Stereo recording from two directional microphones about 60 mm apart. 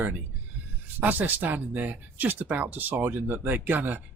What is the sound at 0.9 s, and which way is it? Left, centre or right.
Speech, right.